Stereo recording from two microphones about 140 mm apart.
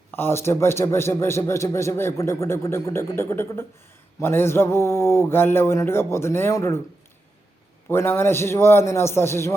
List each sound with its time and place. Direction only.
0.1 s a man's voice: 15° left (ahead or behind)
7.9 s a man's voice: 15° left (ahead or behind)